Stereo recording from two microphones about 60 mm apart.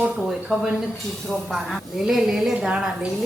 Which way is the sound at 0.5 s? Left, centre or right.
Centre.